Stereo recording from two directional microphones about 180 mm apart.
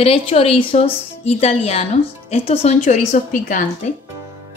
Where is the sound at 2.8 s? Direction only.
45° left (ahead or behind).